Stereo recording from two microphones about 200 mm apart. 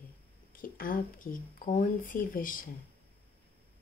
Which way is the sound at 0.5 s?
45° left (ahead or behind).